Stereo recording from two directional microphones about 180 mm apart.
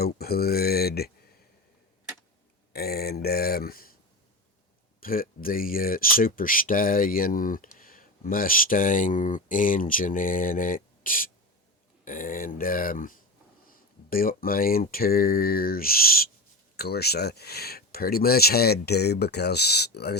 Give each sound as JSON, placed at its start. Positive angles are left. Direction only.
{"t": 0.0, "sound": "speech", "side_deg": 60}
{"t": 2.7, "sound": "speech", "side_deg": 60}
{"t": 4.9, "sound": "speech", "side_deg": 50}